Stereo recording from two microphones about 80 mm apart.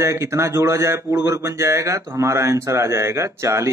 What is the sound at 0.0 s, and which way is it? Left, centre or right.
Speech, right.